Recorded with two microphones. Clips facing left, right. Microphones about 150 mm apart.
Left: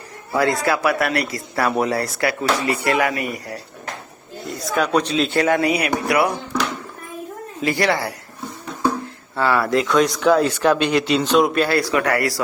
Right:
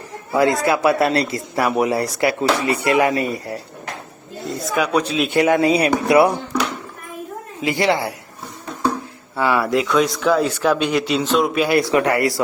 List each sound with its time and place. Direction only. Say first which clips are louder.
0.3 s speech: right 2 dB; 20° right (ahead or behind)
4.7 s a man's voice: left 1 dB; 10° right (ahead or behind); by 6.3 s 25° right (ahead or behind)
7.6 s a man's voice: right 1 dB; 20° right (ahead or behind)
9.3 s a man's voice: even; 15° right (ahead or behind)
9.8 s speech: left 1 dB; centre (ahead or behind)
11.7 s speech: right 3 dB; 20° right (ahead or behind)